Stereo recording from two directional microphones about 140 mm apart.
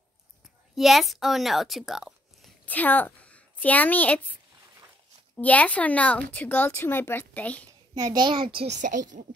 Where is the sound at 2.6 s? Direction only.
10° left (ahead or behind).